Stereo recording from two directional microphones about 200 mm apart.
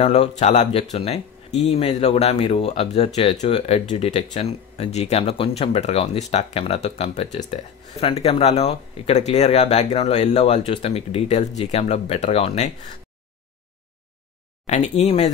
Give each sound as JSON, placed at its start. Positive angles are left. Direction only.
{"t": 0.0, "sound": "speech", "side_deg": 30}
{"t": 14.7, "sound": "speech", "side_deg": 35}